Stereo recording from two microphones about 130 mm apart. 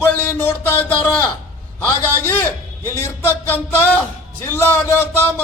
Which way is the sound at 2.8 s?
20° left (ahead or behind).